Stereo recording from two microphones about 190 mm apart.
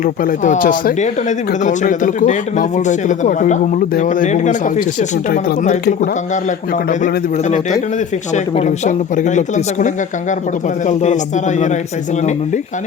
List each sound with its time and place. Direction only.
0.0 s speech: 45° left (ahead or behind)
8.5 s speech: 35° left (ahead or behind)